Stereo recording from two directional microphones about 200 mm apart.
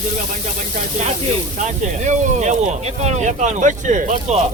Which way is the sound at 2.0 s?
35° right (ahead or behind).